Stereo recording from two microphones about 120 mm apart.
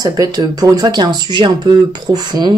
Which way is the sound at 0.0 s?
30° right (ahead or behind).